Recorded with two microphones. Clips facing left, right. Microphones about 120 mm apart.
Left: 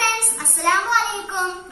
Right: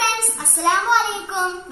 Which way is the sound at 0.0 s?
15° right (ahead or behind).